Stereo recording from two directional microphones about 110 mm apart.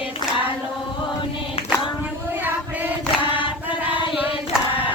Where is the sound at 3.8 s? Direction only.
15° right (ahead or behind).